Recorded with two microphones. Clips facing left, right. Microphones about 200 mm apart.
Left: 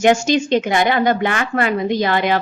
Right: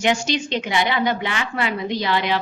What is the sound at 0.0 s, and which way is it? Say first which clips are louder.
A woman's voice: left 7 dB; 45° left (ahead or behind).